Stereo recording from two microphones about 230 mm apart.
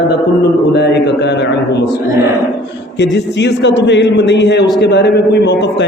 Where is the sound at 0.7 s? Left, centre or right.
Left.